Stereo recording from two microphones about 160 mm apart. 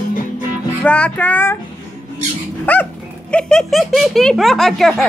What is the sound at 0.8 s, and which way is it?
Speech, 5° left (ahead or behind).